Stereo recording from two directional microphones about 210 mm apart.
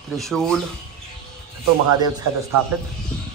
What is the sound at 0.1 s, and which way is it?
Speech, centre (ahead or behind).